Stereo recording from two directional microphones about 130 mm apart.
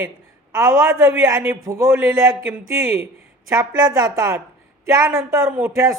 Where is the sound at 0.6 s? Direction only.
25° right (ahead or behind).